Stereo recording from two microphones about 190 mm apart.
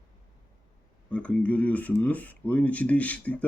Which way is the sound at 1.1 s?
5° left (ahead or behind).